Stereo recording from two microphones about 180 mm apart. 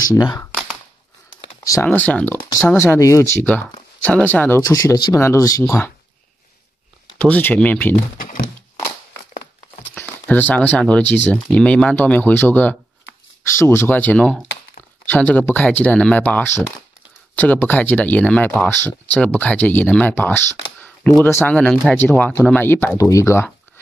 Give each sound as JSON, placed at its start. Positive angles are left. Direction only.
{"t": 0.0, "sound": "speech", "side_deg": 20}
{"t": 7.2, "sound": "speech", "side_deg": 10}
{"t": 8.2, "sound": "a sound", "side_deg": 50}
{"t": 9.2, "sound": "crumpling", "side_deg": 45}
{"t": 9.9, "sound": "speech", "side_deg": 10}